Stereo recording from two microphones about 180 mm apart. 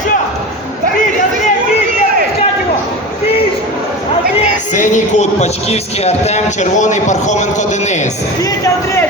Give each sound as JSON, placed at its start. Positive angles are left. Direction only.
{"t": 4.7, "sound": "a man's voice", "side_deg": 45}